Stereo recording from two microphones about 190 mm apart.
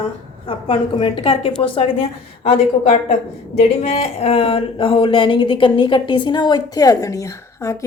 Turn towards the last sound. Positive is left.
turn(degrees=15)  # may be behind; listen again after turning